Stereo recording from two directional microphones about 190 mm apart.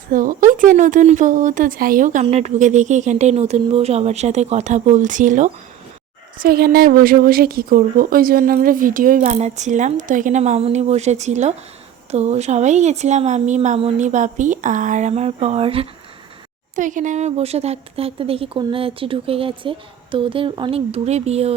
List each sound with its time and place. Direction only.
0.1 s a woman's voice: 45° right (ahead or behind)
6.4 s a woman's voice: 50° right (ahead or behind); by 15.9 s 30° right (ahead or behind)
16.7 s speech: 40° right (ahead or behind)